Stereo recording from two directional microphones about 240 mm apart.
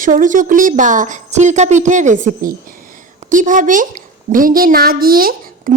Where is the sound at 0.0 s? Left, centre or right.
Right.